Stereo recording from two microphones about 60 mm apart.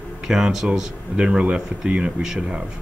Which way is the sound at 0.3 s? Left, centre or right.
Centre.